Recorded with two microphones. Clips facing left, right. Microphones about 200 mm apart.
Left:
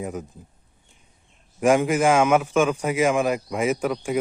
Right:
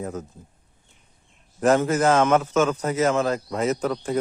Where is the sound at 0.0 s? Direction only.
15° left (ahead or behind).